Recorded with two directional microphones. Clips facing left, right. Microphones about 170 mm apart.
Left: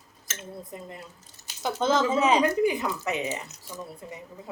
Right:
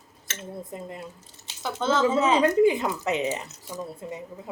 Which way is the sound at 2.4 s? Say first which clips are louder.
Right 4 dB; 20° right (ahead or behind).